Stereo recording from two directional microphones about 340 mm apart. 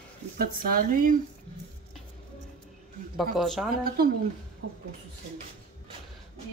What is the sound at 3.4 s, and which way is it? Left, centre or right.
Speech, centre.